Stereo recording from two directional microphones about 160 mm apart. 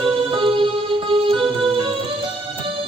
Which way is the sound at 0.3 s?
35° right (ahead or behind).